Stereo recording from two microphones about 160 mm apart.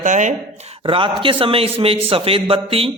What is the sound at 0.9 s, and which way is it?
A man's voice, 35° right (ahead or behind).